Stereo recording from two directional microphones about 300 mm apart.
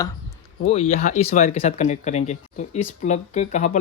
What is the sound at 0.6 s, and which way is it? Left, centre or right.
Speech, centre.